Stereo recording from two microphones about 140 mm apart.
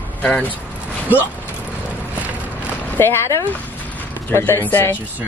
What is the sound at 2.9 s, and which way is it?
Speech, 15° left (ahead or behind).